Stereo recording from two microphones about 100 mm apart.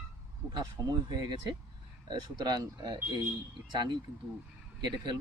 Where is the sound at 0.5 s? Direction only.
40° right (ahead or behind).